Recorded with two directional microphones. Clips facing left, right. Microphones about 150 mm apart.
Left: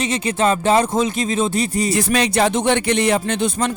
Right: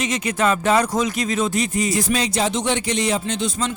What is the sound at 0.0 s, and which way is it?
Speech, 30° left (ahead or behind).